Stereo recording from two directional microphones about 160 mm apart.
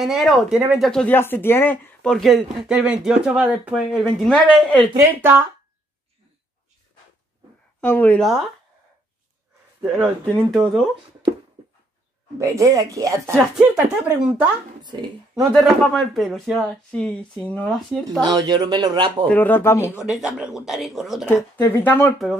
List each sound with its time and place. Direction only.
0.0 s speech: centre (ahead or behind)
7.8 s speech: 10° left (ahead or behind)
9.8 s speech: centre (ahead or behind)
12.4 s speech: 20° right (ahead or behind)
13.6 s speech: 5° right (ahead or behind)
14.8 s a sound: 25° right (ahead or behind)
15.3 s speech: centre (ahead or behind)
18.5 s speech: 25° right (ahead or behind)
19.2 s speech: 10° left (ahead or behind)
20.1 s speech: 5° right (ahead or behind)
21.3 s speech: 15° left (ahead or behind)